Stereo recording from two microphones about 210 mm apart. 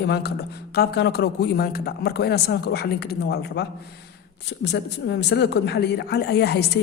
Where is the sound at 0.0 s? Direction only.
50° left (ahead or behind).